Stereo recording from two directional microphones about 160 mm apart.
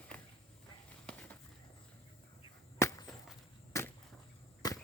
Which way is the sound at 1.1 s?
10° left (ahead or behind).